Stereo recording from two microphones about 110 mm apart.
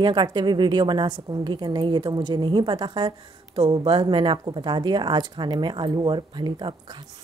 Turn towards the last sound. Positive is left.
turn(degrees=-45)  # may be behind; listen again after turning